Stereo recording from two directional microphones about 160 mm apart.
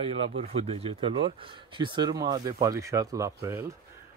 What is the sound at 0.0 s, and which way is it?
Speech, 35° right (ahead or behind).